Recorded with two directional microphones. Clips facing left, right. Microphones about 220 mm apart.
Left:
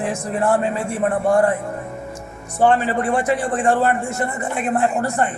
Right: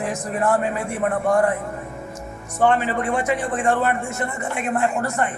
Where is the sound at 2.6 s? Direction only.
30° left (ahead or behind).